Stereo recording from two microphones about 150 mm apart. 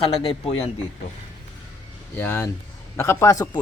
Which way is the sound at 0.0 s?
40° left (ahead or behind).